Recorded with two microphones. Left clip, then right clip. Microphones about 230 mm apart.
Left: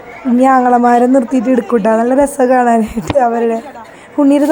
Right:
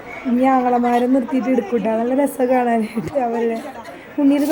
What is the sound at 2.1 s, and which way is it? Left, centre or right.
A woman's voice, centre.